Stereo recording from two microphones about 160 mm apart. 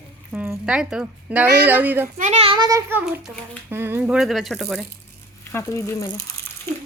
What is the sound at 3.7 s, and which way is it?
Speech, 15° right (ahead or behind).